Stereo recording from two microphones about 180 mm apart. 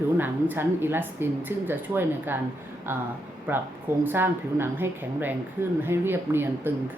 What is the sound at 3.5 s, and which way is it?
Speech, 10° right (ahead or behind).